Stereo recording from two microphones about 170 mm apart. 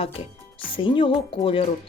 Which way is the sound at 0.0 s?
35° left (ahead or behind).